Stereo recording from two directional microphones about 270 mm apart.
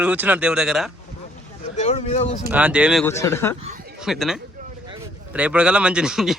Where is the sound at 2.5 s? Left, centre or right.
Centre.